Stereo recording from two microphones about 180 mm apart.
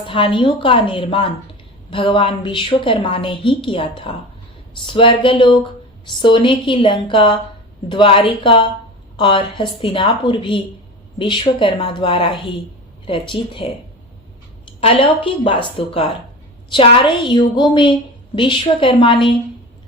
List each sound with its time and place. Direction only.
0.0 s a woman's voice: 30° left (ahead or behind)
14.8 s a woman's voice: 30° left (ahead or behind)